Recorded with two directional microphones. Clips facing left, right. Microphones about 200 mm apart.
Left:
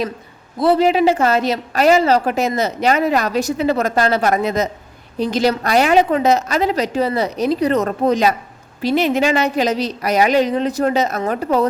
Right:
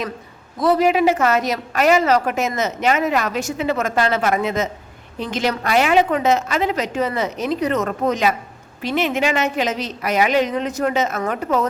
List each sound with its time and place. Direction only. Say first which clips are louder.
0.6 s a woman's voice: left 2 dB; 30° left (ahead or behind)